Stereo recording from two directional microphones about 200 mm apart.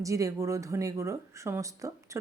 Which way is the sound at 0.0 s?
15° right (ahead or behind).